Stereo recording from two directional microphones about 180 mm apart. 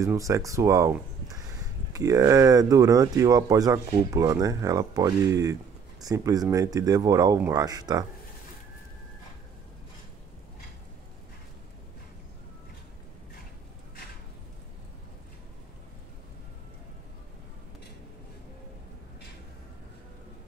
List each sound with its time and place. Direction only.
0.0 s speech: 15° right (ahead or behind)